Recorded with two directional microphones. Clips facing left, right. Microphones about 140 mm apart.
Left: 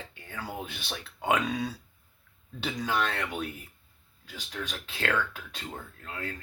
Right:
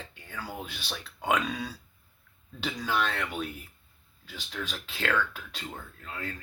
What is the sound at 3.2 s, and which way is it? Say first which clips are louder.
Speech: even; 20° left (ahead or behind).